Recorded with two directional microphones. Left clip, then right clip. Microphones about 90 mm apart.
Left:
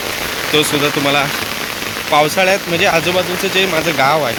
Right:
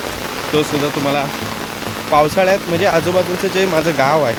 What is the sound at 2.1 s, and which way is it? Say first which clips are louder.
Speech: even; 50° right (ahead or behind).